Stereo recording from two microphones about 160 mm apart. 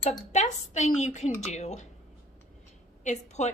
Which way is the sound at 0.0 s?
45° left (ahead or behind).